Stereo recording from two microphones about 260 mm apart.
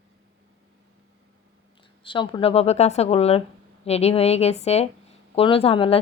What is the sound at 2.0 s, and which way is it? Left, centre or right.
Speech, centre.